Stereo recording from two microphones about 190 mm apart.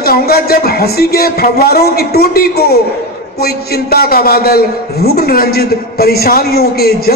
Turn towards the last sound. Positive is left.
turn(degrees=55)  # may be behind; listen again after turning